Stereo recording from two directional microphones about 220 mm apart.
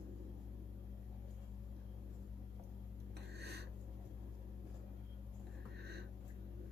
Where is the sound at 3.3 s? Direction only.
50° right (ahead or behind).